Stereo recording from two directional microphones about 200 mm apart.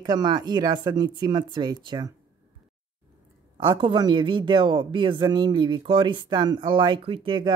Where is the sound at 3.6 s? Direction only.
25° right (ahead or behind).